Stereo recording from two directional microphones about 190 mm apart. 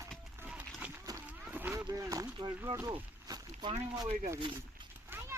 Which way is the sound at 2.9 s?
25° right (ahead or behind).